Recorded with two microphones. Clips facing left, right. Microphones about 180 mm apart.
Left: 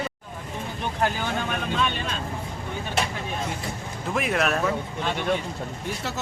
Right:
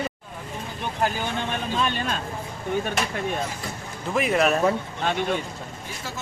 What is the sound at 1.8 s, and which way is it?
Speech, 40° right (ahead or behind).